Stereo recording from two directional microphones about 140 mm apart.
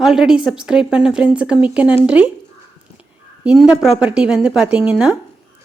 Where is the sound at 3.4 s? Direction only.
5° right (ahead or behind).